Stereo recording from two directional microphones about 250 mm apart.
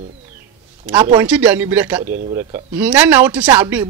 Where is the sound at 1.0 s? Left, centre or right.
Centre.